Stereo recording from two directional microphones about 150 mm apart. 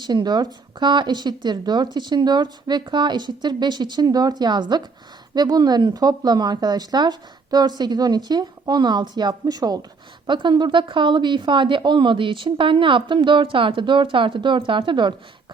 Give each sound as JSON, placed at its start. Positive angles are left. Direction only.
{"t": 0.0, "sound": "a woman's voice", "side_deg": -30}